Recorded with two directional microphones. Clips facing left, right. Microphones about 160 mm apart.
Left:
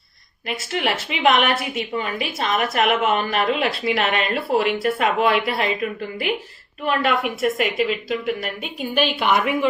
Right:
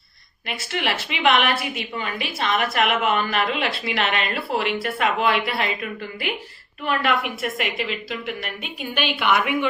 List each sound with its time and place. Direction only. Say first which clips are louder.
0.6 s a woman's voice: left 2 dB; 35° left (ahead or behind)
6.8 s a woman's voice: left 2 dB; 40° left (ahead or behind)